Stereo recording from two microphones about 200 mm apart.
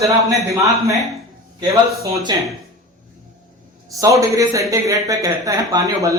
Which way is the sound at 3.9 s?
15° right (ahead or behind).